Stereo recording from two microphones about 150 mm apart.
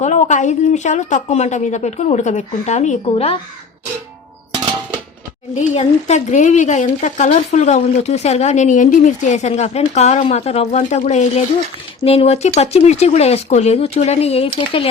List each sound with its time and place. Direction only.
0.0 s speech: 50° left (ahead or behind)
5.5 s speech: 50° left (ahead or behind)
12.0 s speech: 40° left (ahead or behind)